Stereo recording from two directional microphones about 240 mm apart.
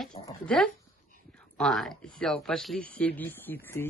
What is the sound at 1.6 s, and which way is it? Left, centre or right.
Speech, centre.